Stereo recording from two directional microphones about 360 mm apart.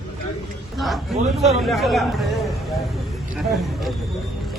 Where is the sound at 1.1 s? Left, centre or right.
Centre.